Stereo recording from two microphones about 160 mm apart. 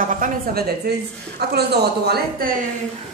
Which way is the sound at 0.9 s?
90° right.